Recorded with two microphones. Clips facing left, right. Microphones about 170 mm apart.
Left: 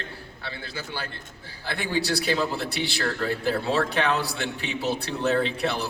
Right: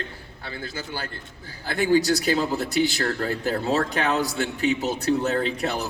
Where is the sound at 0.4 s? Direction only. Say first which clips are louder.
Right 3 dB; 40° right (ahead or behind).